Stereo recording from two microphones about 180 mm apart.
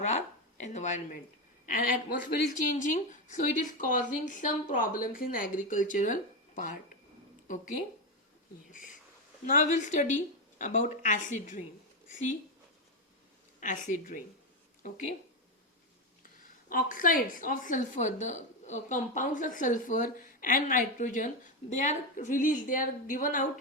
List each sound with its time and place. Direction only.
0.0 s a woman's voice: 40° left (ahead or behind)
7.4 s speech: 45° left (ahead or behind)
8.7 s a woman's voice: 45° left (ahead or behind)
13.6 s a woman's voice: 45° left (ahead or behind)
16.2 s a woman's voice: 50° left (ahead or behind)